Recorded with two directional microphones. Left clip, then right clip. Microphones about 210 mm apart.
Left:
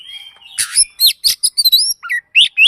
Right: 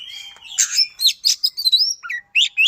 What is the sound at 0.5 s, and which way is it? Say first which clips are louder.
Bird: even; 25° left (ahead or behind).